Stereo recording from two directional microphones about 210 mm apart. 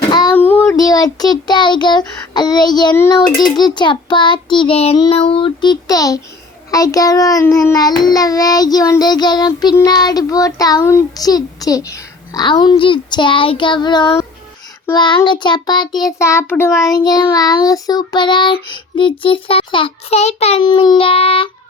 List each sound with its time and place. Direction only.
0.3 s a child's voice: 10° left (ahead or behind); by 21.5 s 25° left (ahead or behind)